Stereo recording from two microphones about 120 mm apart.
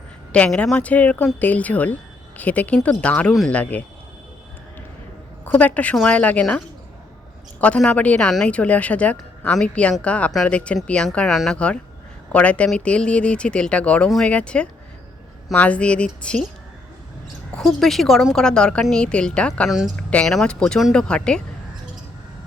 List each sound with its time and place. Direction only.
0.3 s speech: 10° left (ahead or behind)
5.5 s speech: 15° left (ahead or behind)
7.6 s speech: 10° left (ahead or behind)
17.5 s a woman's voice: 5° left (ahead or behind)